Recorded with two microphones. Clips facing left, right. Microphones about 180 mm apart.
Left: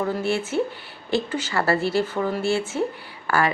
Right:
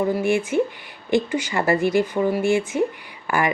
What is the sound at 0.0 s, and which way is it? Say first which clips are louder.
Speech: right 4 dB; 15° right (ahead or behind).